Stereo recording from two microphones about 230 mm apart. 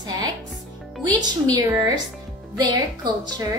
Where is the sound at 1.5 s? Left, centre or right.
Centre.